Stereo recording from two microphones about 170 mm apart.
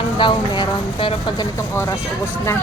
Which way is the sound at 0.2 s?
25° left (ahead or behind).